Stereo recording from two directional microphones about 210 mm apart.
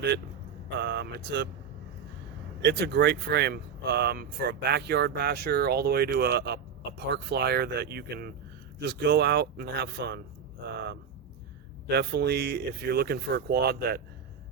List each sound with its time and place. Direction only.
0.8 s speech: 55° right (ahead or behind)
2.6 s speech: 55° right (ahead or behind)